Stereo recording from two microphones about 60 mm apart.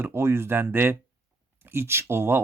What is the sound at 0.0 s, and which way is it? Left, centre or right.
Speech, right.